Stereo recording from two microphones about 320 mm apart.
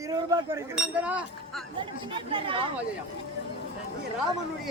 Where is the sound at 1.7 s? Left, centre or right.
Centre.